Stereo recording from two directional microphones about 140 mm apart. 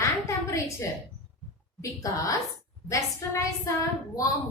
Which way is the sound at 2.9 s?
20° left (ahead or behind).